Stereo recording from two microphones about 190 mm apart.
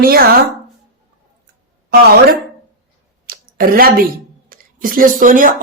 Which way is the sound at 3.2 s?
50° right (ahead or behind).